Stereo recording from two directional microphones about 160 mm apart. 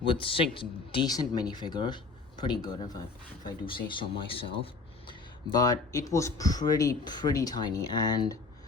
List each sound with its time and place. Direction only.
0.0 s speech: 35° left (ahead or behind)
5.5 s speech: 25° left (ahead or behind)